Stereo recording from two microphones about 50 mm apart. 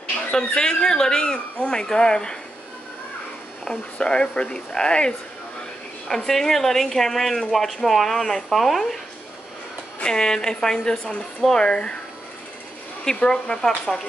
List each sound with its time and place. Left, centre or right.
0.3 s speech: centre
3.6 s speech: left; by 9.0 s centre
10.0 s speech: centre
13.2 s speech: centre